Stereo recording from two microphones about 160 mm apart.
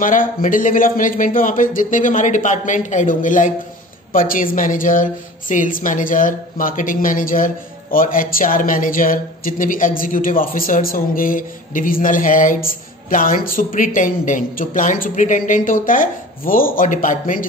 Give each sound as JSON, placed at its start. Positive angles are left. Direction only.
{"t": 0.0, "sound": "a woman's voice", "side_deg": 55}